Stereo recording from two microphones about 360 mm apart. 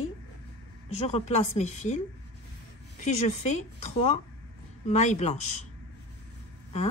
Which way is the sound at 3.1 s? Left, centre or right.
Centre.